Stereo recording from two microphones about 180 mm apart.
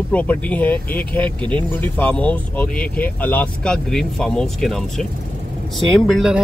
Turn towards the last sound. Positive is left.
turn(degrees=0)  # may be behind; listen again after turning